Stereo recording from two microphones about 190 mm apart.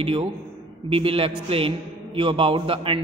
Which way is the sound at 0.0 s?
30° right (ahead or behind).